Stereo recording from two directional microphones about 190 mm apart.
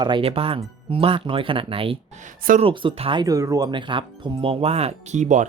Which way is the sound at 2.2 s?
45° right (ahead or behind).